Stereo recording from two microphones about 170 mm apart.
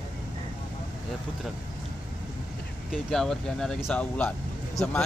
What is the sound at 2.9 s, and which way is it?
Speech, 5° left (ahead or behind).